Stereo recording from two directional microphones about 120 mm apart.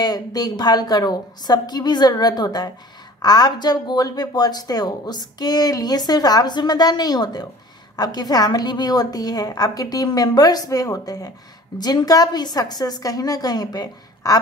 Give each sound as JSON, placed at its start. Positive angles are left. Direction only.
{"t": 0.0, "sound": "speech", "side_deg": 35}